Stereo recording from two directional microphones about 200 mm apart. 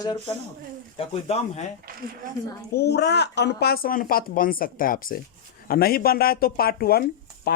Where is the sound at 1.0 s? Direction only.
30° left (ahead or behind).